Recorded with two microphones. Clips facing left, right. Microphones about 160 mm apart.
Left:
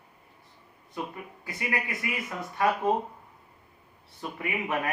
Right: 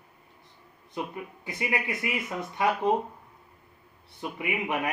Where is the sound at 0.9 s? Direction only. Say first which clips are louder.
Right 2 dB; 20° right (ahead or behind).